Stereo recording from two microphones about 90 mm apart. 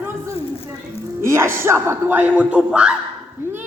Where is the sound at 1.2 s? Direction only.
30° right (ahead or behind); by 2.9 s 10° right (ahead or behind).